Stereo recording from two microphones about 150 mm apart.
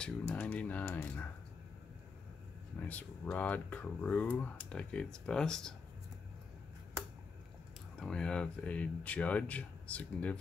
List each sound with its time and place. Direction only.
0.0 s speech: 10° left (ahead or behind)
2.9 s speech: 10° left (ahead or behind)
8.0 s speech: 5° left (ahead or behind)